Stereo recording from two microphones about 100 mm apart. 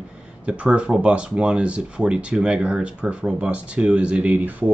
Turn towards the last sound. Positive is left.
turn(degrees=-15)  # may be behind; listen again after turning